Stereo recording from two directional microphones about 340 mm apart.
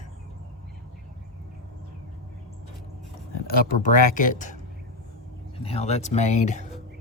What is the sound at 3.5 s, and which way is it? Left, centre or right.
Speech, left.